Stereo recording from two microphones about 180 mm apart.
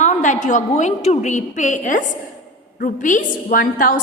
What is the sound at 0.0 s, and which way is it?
A woman's voice, 40° left (ahead or behind).